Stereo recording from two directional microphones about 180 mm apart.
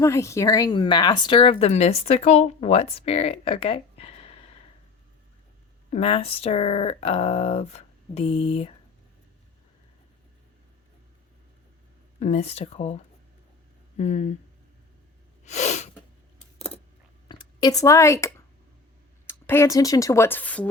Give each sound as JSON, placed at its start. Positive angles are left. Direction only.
{"t": 0.0, "sound": "speech", "side_deg": 15}
{"t": 5.9, "sound": "speech", "side_deg": 35}
{"t": 12.2, "sound": "speech", "side_deg": 35}
{"t": 15.4, "sound": "sneeze", "side_deg": 40}
{"t": 16.6, "sound": "a sound", "side_deg": 35}
{"t": 17.2, "sound": "a sound", "side_deg": 25}
{"t": 19.3, "sound": "speech", "side_deg": 15}